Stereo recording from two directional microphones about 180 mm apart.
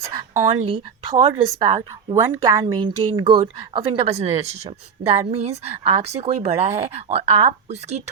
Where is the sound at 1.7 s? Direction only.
15° right (ahead or behind).